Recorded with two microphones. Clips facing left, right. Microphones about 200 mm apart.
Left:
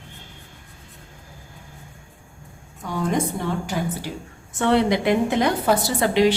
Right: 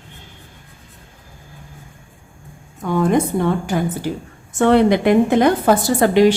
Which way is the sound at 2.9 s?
55° right (ahead or behind).